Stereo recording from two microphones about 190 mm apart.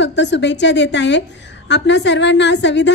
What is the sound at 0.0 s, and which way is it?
A woman's voice, 65° left (ahead or behind).